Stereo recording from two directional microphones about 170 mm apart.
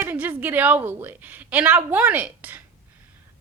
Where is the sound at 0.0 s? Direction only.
10° right (ahead or behind).